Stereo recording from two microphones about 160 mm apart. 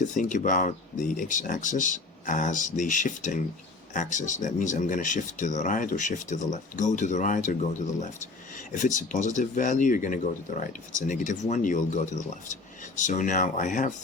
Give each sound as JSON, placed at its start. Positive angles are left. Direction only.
{"t": 0.0, "sound": "speech", "side_deg": 50}